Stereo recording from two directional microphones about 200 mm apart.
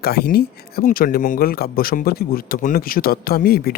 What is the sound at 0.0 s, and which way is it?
Speech, 50° left (ahead or behind).